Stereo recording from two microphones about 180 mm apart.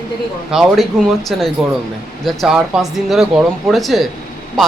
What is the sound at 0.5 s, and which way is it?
Speech, centre (ahead or behind).